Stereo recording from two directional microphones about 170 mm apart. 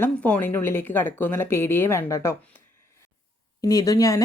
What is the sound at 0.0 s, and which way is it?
Speech, 10° left (ahead or behind).